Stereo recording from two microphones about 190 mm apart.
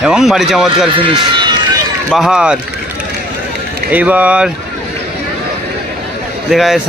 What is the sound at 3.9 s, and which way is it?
Speech, 10° right (ahead or behind).